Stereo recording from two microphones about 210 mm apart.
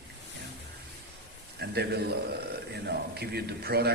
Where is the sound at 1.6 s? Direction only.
50° right (ahead or behind).